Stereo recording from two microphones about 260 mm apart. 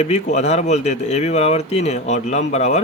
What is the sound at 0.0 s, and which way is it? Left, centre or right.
A man's voice, left.